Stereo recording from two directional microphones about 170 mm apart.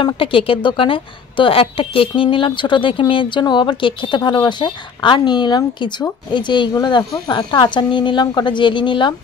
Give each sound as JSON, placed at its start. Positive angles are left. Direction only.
{"t": 0.0, "sound": "a woman's voice", "side_deg": 30}